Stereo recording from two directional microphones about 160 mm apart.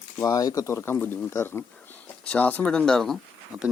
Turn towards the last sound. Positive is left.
turn(degrees=-5)  # may be behind; listen again after turning